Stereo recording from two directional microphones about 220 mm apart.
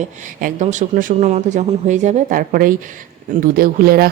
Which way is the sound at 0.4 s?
35° right (ahead or behind).